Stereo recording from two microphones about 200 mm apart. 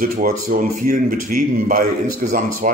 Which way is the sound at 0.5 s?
40° right (ahead or behind).